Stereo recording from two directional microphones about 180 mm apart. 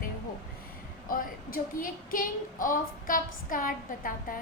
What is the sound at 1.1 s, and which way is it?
A woman's voice, 50° left (ahead or behind).